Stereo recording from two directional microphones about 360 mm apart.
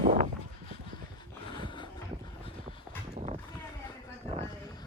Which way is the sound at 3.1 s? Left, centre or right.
Centre.